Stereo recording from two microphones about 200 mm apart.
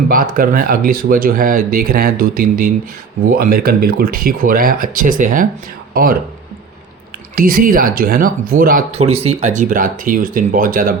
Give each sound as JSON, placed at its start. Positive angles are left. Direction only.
{"t": 0.3, "sound": "speech", "side_deg": -45}
{"t": 7.3, "sound": "speech", "side_deg": -45}
{"t": 9.1, "sound": "speech", "side_deg": -30}